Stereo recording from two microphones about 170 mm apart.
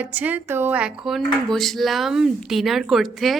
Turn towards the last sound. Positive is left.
turn(degrees=0)  # may be behind; listen again after turning